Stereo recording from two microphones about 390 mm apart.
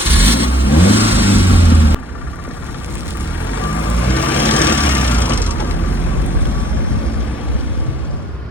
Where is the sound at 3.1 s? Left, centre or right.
Centre.